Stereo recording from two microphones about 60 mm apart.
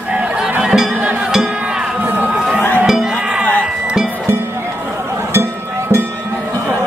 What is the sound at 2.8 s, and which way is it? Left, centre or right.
Crowd, centre.